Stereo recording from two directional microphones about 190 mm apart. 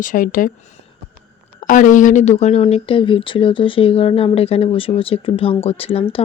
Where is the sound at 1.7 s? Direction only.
40° left (ahead or behind).